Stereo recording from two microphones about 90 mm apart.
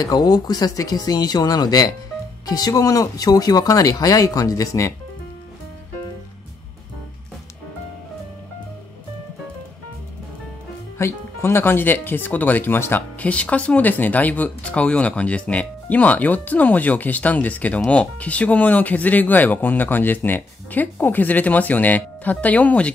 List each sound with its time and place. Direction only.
0.0 s speech: 45° left (ahead or behind)
11.0 s speech: 30° left (ahead or behind)
13.3 s speech: 15° left (ahead or behind)